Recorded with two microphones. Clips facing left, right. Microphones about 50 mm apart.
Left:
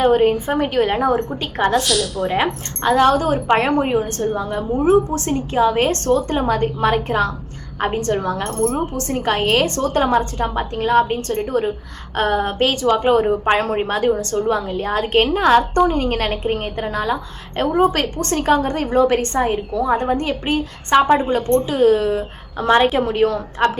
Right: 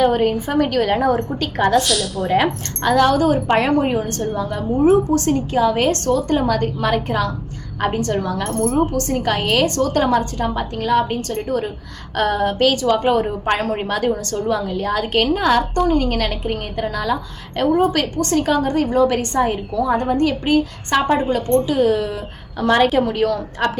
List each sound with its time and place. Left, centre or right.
0.0 s a woman's voice: left
1.4 s a woman's voice: left
1.7 s a woman's voice: centre
2.4 s a woman's voice: left
3.8 s a woman's voice: centre
4.2 s a woman's voice: left
22.6 s a woman's voice: centre
23.0 s a woman's voice: left